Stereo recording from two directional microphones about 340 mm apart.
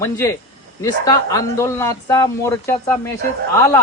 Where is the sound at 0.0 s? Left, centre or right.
Centre.